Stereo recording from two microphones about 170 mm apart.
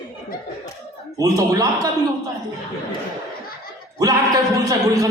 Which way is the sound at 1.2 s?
20° right (ahead or behind).